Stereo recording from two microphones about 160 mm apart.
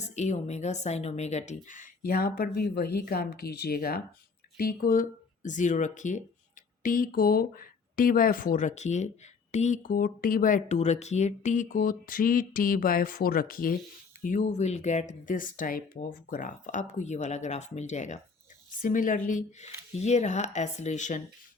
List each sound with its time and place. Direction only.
0.0 s speech: 45° left (ahead or behind)
6.8 s speech: 60° left (ahead or behind)